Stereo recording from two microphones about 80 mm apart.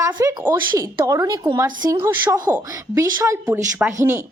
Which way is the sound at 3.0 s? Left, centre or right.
Right.